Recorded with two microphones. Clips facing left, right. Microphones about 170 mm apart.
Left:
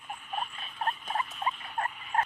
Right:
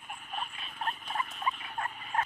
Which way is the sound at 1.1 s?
35° left (ahead or behind).